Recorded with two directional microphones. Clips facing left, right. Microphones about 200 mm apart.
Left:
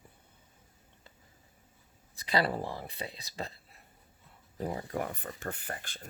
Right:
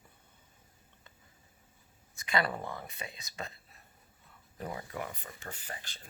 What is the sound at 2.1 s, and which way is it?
Speech, 35° left (ahead or behind).